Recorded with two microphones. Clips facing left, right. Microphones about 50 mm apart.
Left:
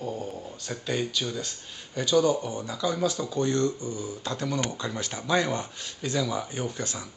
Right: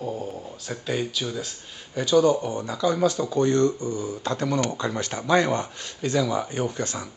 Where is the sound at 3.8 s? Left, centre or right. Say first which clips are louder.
Right 5 dB; right.